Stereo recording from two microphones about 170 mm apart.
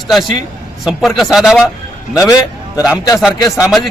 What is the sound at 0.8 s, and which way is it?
Speech, centre (ahead or behind).